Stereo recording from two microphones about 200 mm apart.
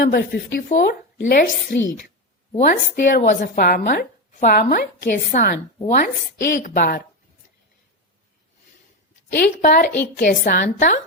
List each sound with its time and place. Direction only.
0.0 s a woman's voice: 55° left (ahead or behind)
9.3 s a woman's voice: 45° left (ahead or behind)